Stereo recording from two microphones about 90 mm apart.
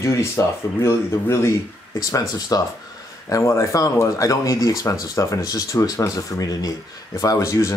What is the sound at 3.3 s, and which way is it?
Speech, 35° left (ahead or behind).